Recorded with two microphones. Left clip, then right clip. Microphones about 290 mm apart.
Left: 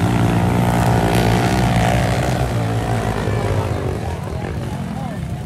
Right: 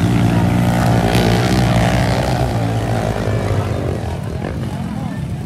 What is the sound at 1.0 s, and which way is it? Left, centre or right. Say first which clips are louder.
Vehicle: right 1 dB; centre.